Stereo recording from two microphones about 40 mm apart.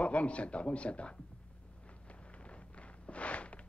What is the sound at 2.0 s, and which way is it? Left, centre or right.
Walk, left.